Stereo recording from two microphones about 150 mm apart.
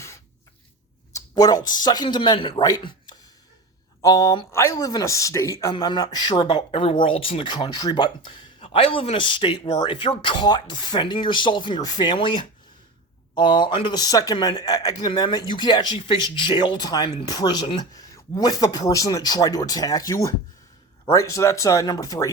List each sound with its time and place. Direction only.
1.1 s speech: 25° left (ahead or behind)